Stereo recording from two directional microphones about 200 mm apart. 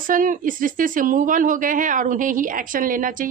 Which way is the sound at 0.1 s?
40° right (ahead or behind).